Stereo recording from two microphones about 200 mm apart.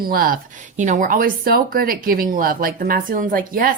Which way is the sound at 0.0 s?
45° right (ahead or behind).